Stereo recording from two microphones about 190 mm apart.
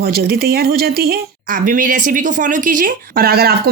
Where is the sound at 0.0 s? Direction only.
55° right (ahead or behind).